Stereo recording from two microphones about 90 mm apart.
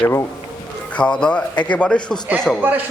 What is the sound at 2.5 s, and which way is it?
Speech, centre (ahead or behind).